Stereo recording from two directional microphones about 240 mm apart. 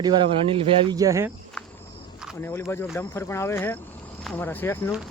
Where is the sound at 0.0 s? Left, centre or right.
Right.